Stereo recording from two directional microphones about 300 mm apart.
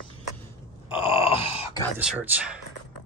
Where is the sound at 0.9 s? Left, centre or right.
Centre.